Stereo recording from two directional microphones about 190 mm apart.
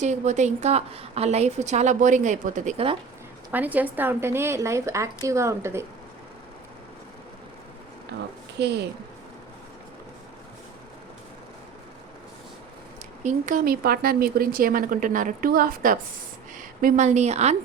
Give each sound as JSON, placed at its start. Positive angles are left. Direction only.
{"t": 0.0, "sound": "a woman's voice", "side_deg": -40}
{"t": 3.5, "sound": "a woman's voice", "side_deg": -10}
{"t": 8.6, "sound": "a woman's voice", "side_deg": -60}
{"t": 13.2, "sound": "a woman's voice", "side_deg": -45}